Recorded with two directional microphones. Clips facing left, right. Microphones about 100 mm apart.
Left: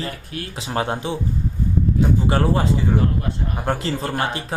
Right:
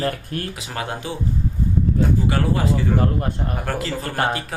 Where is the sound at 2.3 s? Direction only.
30° left (ahead or behind).